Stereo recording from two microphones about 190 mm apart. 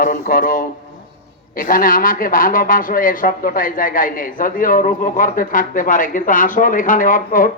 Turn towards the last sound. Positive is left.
turn(degrees=45)  # may be behind; listen again after turning